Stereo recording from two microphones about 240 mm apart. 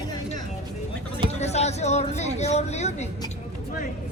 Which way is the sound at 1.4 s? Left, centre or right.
Left.